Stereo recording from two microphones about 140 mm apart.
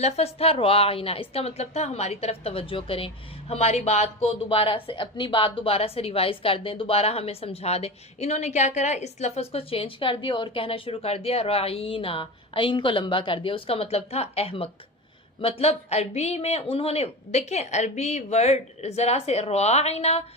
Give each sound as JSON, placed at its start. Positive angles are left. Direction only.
{"t": 0.0, "sound": "speech", "side_deg": 45}